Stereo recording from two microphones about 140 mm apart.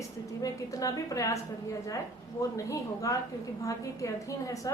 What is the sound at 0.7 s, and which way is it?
Speech, 25° left (ahead or behind).